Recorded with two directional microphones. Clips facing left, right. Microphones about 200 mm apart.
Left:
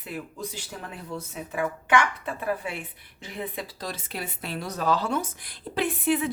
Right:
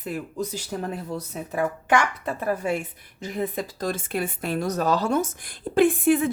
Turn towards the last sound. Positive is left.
turn(degrees=-50)  # may be behind; listen again after turning